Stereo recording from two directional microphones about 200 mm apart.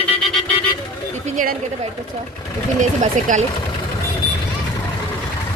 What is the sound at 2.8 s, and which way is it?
Speech, 40° right (ahead or behind).